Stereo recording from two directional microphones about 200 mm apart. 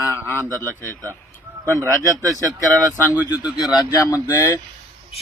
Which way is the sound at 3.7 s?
20° left (ahead or behind).